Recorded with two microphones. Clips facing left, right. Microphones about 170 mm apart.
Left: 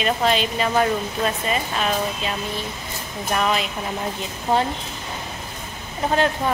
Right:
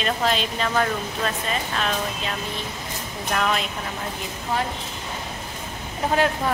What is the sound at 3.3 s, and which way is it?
Speech, 5° left (ahead or behind).